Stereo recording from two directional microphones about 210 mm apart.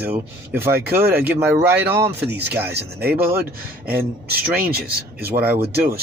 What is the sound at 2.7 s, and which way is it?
Speech, 50° right (ahead or behind).